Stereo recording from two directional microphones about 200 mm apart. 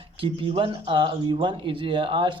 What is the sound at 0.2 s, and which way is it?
Speech, 25° right (ahead or behind).